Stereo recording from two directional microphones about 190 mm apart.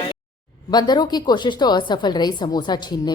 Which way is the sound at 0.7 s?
20° left (ahead or behind).